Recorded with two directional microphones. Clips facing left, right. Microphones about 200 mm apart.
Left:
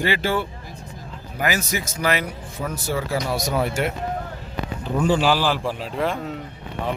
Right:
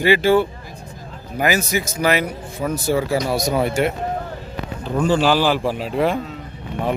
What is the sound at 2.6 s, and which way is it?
Speech, 25° right (ahead or behind).